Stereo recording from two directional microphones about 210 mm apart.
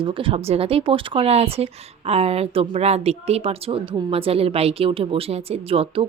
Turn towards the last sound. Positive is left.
turn(degrees=-25)  # may be behind; listen again after turning